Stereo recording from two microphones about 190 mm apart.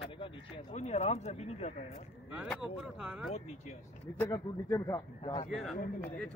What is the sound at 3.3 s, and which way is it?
Speech, 35° left (ahead or behind).